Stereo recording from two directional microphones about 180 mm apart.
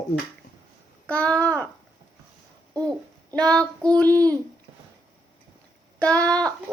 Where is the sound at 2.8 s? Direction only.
5° left (ahead or behind).